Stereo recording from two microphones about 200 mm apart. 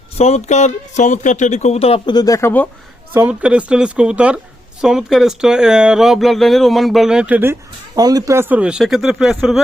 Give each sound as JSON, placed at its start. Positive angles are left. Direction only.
{"t": 0.2, "sound": "speech", "side_deg": 35}
{"t": 3.1, "sound": "speech", "side_deg": -10}
{"t": 7.9, "sound": "speech", "side_deg": -20}